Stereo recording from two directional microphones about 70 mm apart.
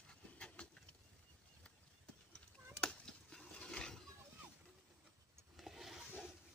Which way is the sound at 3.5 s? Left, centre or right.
Centre.